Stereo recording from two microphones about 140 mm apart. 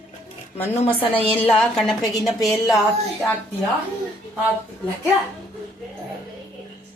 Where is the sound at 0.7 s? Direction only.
45° left (ahead or behind).